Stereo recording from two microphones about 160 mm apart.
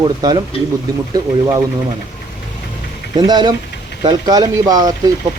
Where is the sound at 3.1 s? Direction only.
25° right (ahead or behind).